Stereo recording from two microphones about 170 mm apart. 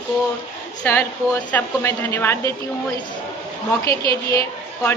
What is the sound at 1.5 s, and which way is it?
A woman's voice, 10° left (ahead or behind).